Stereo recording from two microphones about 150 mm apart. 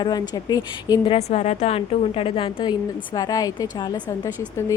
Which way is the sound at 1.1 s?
45° left (ahead or behind).